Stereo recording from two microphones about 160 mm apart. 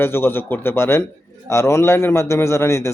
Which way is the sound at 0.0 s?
15° left (ahead or behind).